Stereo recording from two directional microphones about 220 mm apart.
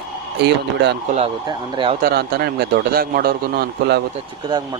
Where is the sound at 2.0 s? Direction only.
45° right (ahead or behind).